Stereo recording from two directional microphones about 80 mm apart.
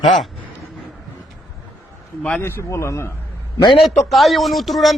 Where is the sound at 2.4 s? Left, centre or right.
Left.